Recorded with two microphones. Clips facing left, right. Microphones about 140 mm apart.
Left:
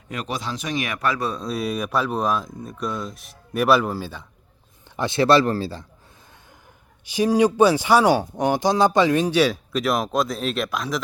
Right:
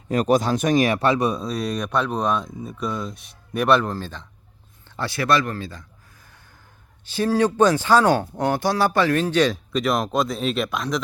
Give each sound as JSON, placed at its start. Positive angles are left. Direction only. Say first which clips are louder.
{"t": 0.1, "sound": "speech", "louder": "right 10 dB", "side_deg": -45}
{"t": 1.5, "sound": "speech", "louder": "even", "side_deg": 5}
{"t": 4.9, "sound": "speech", "louder": "left 4 dB", "side_deg": 25}
{"t": 7.0, "sound": "speech", "louder": "left 2 dB", "side_deg": 15}